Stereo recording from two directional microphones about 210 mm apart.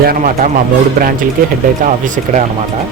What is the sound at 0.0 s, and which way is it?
Speech, 45° right (ahead or behind).